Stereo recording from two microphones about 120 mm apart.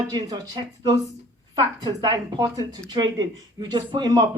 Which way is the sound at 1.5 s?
35° right (ahead or behind).